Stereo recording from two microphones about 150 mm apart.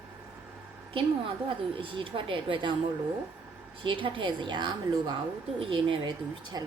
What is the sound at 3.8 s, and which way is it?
A woman's voice, 35° right (ahead or behind).